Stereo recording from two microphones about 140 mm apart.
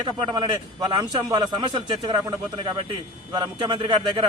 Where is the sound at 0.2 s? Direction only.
30° right (ahead or behind).